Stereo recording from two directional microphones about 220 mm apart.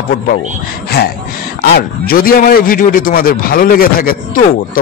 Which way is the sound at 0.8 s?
45° left (ahead or behind).